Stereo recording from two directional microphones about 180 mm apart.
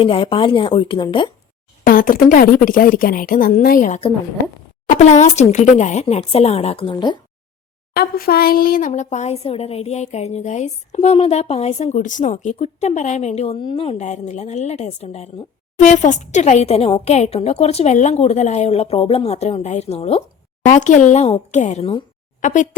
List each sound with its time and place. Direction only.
0.0 s speech: 30° left (ahead or behind)
1.8 s a woman's voice: 50° left (ahead or behind); by 7.2 s 25° left (ahead or behind)
7.9 s speech: 55° left (ahead or behind)
8.9 s a woman's voice: 40° left (ahead or behind)
14.0 s a woman's voice: 40° left (ahead or behind)